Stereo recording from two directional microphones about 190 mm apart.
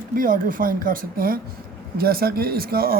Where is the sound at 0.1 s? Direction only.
45° right (ahead or behind).